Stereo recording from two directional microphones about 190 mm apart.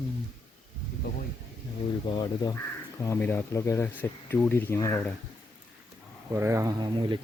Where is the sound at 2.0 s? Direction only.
20° left (ahead or behind).